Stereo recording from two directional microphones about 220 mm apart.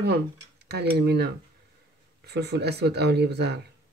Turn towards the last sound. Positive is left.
turn(degrees=-50)  # may be behind; listen again after turning